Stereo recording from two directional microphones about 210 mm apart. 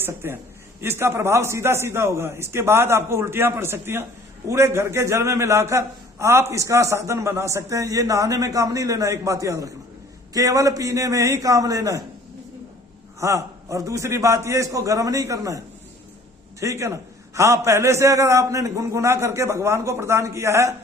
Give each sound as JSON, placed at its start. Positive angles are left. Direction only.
{"t": 0.0, "sound": "a man's voice", "side_deg": -10}
{"t": 13.1, "sound": "a man's voice", "side_deg": -15}